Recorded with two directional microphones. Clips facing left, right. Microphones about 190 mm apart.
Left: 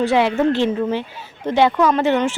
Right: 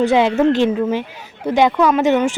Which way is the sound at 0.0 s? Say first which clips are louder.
Right 3 dB; 20° right (ahead or behind).